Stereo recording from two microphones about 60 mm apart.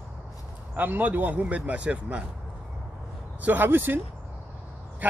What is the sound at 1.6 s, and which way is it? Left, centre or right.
Speech, centre.